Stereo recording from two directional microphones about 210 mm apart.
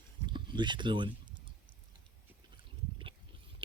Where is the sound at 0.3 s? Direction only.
20° right (ahead or behind).